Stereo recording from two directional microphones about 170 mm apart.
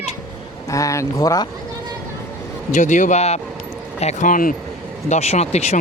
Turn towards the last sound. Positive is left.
turn(degrees=40)  # may be behind; listen again after turning